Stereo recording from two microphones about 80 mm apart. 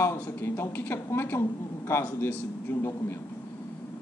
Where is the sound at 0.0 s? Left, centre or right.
Left.